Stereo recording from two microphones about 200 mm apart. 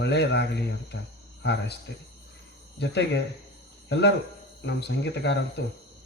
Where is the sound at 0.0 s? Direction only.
60° left (ahead or behind).